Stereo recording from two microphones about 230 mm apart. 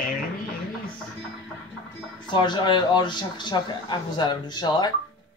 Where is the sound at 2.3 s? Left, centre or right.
Centre.